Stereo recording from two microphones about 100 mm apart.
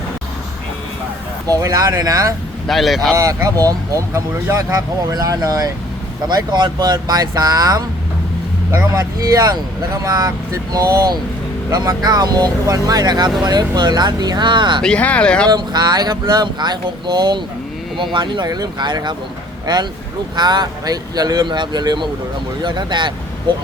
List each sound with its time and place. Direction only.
1.5 s speech: 35° right (ahead or behind)
2.6 s speech: centre (ahead or behind)
3.2 s speech: 35° right (ahead or behind)
6.2 s speech: 45° right (ahead or behind)
9.0 s speech: 35° right (ahead or behind); by 14.8 s 50° right (ahead or behind)
14.8 s speech: 10° left (ahead or behind)
15.4 s speech: 45° right (ahead or behind)